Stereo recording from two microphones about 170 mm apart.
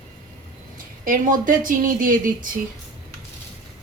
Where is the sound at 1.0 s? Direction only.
50° right (ahead or behind).